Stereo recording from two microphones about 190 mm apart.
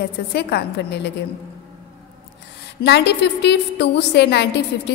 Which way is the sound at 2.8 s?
60° left (ahead or behind).